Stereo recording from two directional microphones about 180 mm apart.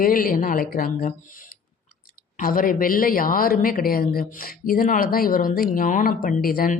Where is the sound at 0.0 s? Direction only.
50° left (ahead or behind).